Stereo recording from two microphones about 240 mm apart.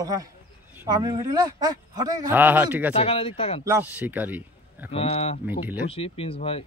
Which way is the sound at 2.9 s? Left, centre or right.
Left.